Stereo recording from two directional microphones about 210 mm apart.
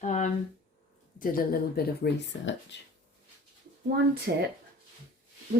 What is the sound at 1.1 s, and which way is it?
Speech, 40° left (ahead or behind).